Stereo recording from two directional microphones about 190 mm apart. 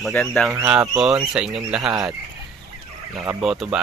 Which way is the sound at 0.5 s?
10° right (ahead or behind).